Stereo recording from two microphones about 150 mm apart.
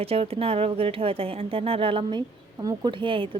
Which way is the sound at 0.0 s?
40° right (ahead or behind).